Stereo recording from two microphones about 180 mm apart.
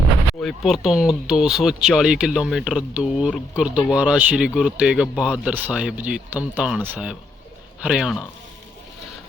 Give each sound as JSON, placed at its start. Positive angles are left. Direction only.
{"t": 0.3, "sound": "speech", "side_deg": 0}